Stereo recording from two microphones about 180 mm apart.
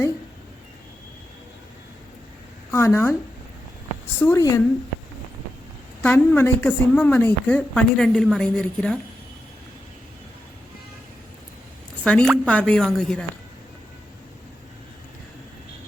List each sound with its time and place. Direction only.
2.7 s a woman's voice: 15° left (ahead or behind)
4.2 s a woman's voice: 15° left (ahead or behind)
6.0 s a woman's voice: 10° left (ahead or behind)
12.0 s a woman's voice: 5° left (ahead or behind)